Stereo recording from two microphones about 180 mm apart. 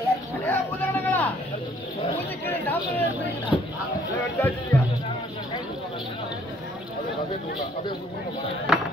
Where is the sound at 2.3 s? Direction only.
10° left (ahead or behind).